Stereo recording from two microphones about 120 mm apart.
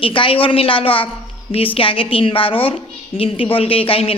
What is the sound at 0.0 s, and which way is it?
A woman's voice, 45° left (ahead or behind).